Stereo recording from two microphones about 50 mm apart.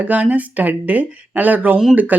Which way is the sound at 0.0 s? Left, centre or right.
Right.